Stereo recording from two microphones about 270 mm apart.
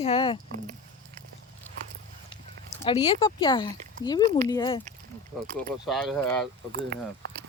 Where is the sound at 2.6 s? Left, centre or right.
Left.